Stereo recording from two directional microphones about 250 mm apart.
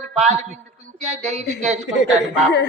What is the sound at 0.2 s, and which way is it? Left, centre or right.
A man's voice, right.